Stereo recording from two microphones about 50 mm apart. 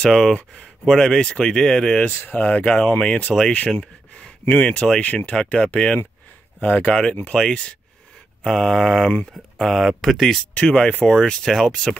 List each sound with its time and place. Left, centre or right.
0.0 s speech: centre
2.1 s speech: left
2.4 s speech: left
3.8 s speech: centre
5.0 s speech: left
8.5 s speech: centre
10.5 s speech: centre